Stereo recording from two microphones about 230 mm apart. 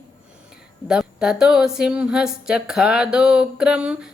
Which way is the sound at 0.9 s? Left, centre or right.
Centre.